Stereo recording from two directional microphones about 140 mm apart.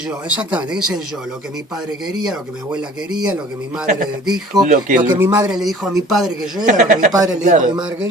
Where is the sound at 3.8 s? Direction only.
75° right (ahead or behind).